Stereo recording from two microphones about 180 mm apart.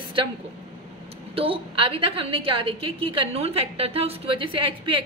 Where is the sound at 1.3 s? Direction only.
30° right (ahead or behind).